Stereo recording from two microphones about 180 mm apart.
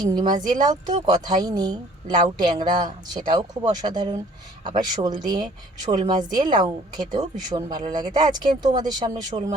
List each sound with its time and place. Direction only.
0.0 s a woman's voice: 25° right (ahead or behind)